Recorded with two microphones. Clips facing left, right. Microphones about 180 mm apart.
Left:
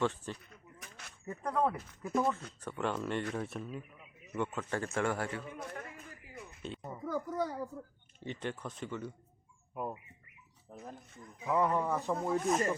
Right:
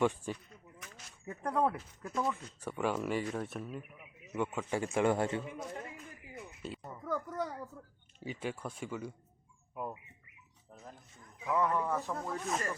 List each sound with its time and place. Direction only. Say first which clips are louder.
0.0 s a man's voice: right 3 dB; 10° right (ahead or behind)
1.4 s a man's voice: right 1 dB; 5° right (ahead or behind)
2.3 s a man's voice: right 1 dB; 10° right (ahead or behind)
5.4 s a sound: right 2 dB; 15° right (ahead or behind)
6.3 s music: even; 5° right (ahead or behind)
6.9 s a child's voice: left 2 dB; 5° left (ahead or behind)
8.2 s a man's voice: even; 5° right (ahead or behind)
11.4 s speech: left 1 dB; 15° left (ahead or behind)